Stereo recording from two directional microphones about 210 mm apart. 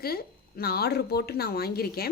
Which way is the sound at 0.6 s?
50° left (ahead or behind).